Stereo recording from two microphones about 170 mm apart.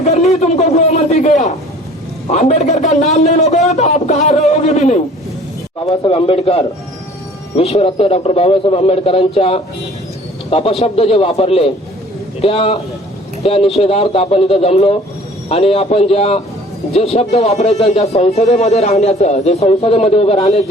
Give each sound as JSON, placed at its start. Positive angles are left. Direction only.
{"t": 0.0, "sound": "a sound", "side_deg": 40}
{"t": 2.2, "sound": "a man's voice", "side_deg": 40}
{"t": 5.8, "sound": "a man's voice", "side_deg": 30}